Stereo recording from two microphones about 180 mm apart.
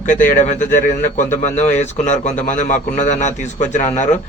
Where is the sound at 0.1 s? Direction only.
45° left (ahead or behind).